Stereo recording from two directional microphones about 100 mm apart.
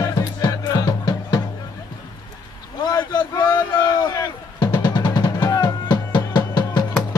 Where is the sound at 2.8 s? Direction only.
40° left (ahead or behind).